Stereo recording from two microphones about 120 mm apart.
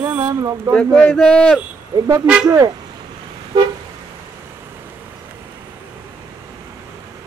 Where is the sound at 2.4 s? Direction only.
30° right (ahead or behind).